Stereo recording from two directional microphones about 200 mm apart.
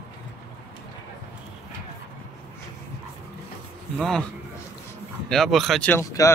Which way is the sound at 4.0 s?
Centre (ahead or behind).